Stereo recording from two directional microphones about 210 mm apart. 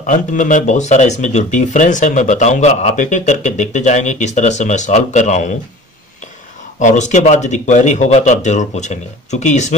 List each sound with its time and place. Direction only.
0.0 s speech: 35° left (ahead or behind)
6.8 s speech: 35° left (ahead or behind)